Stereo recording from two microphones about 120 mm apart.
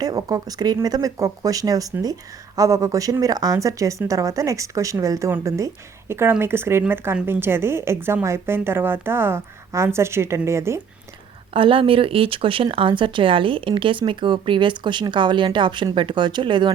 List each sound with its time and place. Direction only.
0.0 s speech: 30° right (ahead or behind)
11.5 s speech: 45° right (ahead or behind)